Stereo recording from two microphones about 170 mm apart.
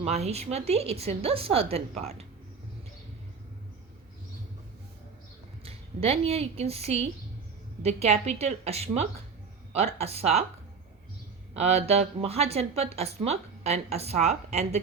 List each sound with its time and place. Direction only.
0.0 s a woman's voice: 40° right (ahead or behind)
5.6 s a woman's voice: 35° right (ahead or behind)
11.5 s a woman's voice: 40° right (ahead or behind)